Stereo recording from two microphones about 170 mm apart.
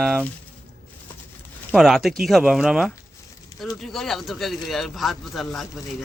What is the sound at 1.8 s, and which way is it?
Speech, centre (ahead or behind).